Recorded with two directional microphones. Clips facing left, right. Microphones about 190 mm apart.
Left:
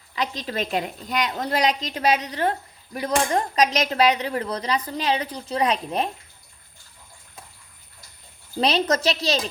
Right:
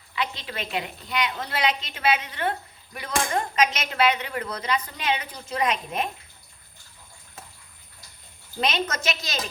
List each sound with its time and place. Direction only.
0.2 s a woman's voice: 40° left (ahead or behind)
8.6 s a woman's voice: 35° left (ahead or behind)